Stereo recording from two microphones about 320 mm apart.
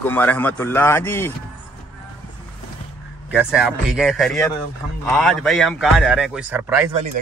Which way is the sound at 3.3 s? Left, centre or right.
Centre.